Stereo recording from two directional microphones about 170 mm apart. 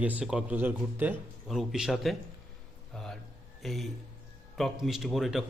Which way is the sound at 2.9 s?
Centre (ahead or behind).